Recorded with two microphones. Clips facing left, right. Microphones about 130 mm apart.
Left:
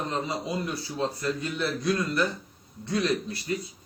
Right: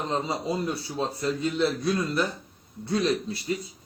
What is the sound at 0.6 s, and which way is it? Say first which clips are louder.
A man's voice: right 1 dB; 20° right (ahead or behind).